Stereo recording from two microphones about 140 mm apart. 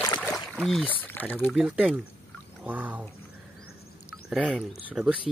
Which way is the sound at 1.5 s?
5° right (ahead or behind).